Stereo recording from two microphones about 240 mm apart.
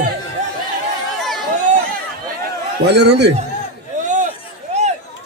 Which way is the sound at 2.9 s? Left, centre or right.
Right.